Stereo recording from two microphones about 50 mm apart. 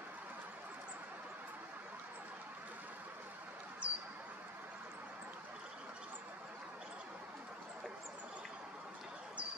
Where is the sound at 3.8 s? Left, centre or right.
Right.